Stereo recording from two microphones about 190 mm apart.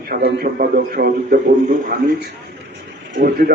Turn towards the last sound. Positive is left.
turn(degrees=-55)  # may be behind; listen again after turning